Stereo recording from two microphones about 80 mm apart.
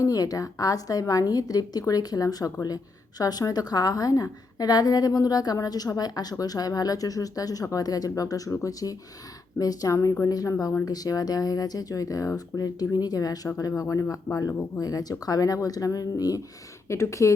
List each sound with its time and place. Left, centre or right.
0.0 s a woman's voice: left
16.9 s speech: left